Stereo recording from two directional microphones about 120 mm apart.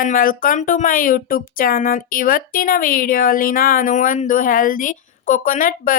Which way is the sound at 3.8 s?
90° left.